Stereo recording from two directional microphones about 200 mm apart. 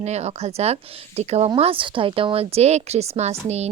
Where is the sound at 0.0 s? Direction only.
30° right (ahead or behind).